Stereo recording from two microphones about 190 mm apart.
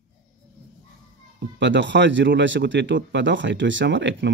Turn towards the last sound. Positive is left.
turn(degrees=-70)  # may be behind; listen again after turning